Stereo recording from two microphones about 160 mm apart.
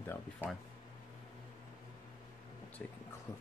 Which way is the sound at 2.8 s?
10° left (ahead or behind).